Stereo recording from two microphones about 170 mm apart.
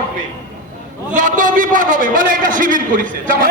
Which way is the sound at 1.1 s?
50° right (ahead or behind).